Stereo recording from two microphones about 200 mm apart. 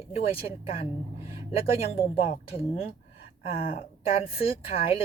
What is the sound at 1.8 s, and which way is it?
A woman's voice, 30° left (ahead or behind).